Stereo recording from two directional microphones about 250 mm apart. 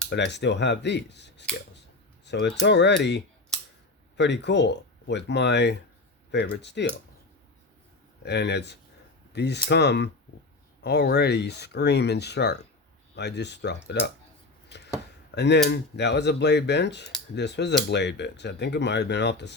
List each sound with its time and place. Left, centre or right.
0.1 s speech: left
8.2 s speech: left
14.7 s a sound: left
15.4 s speech: left